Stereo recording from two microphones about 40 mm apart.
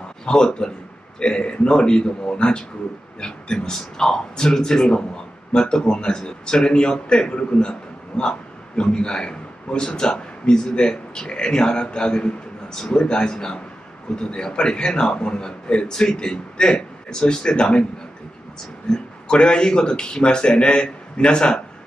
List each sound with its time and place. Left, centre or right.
0.2 s a man's voice: centre
18.9 s a man's voice: centre